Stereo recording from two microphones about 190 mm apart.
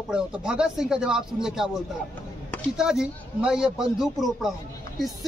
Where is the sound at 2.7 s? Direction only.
5° right (ahead or behind).